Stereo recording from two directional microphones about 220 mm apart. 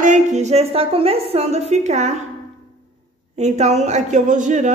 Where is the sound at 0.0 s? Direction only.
35° right (ahead or behind).